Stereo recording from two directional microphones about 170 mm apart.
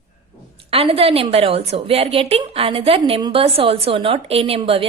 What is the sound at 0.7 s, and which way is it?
A woman's voice, 35° right (ahead or behind).